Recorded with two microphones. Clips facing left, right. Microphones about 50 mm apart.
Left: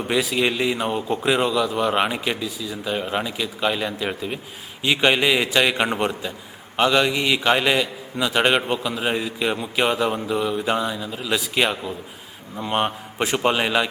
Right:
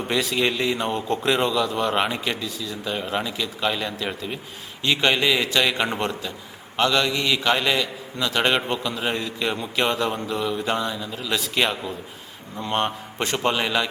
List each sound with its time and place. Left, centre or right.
0.0 s a man's voice: centre